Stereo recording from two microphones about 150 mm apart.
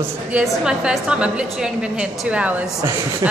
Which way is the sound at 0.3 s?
5° right (ahead or behind).